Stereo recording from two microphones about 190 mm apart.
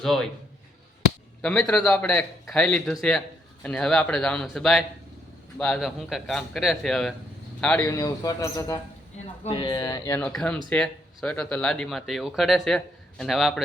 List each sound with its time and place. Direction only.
0.0 s a man's voice: centre (ahead or behind)
1.4 s a man's voice: 5° left (ahead or behind)
7.9 s speech: 15° left (ahead or behind)
9.4 s speech: 25° left (ahead or behind)
10.2 s a man's voice: 5° left (ahead or behind)